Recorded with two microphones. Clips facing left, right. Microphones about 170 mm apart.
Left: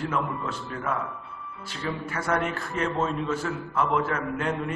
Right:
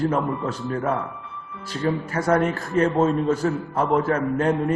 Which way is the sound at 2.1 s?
40° right (ahead or behind).